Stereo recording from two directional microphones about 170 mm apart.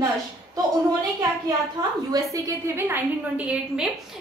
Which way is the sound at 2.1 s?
15° right (ahead or behind).